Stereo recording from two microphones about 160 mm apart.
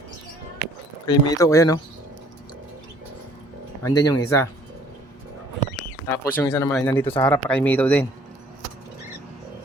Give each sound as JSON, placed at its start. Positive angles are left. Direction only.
{"t": 1.0, "sound": "speech", "side_deg": 20}
{"t": 3.8, "sound": "speech", "side_deg": 25}
{"t": 6.1, "sound": "speech", "side_deg": 15}